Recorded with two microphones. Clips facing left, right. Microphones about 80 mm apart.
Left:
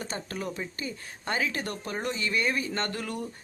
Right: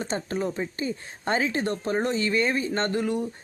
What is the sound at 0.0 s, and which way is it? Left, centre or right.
Speech, right.